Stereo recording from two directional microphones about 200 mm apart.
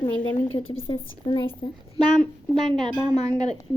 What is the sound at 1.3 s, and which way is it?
Speech, 25° left (ahead or behind).